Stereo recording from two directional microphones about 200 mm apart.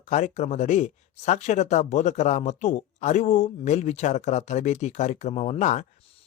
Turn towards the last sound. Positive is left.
turn(degrees=35)  # may be behind; listen again after turning